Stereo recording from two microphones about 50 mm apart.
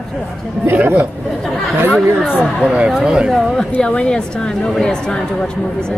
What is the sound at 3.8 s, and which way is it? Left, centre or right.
Speech, centre.